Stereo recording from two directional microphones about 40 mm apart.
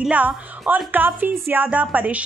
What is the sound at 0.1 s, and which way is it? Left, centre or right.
Speech, right.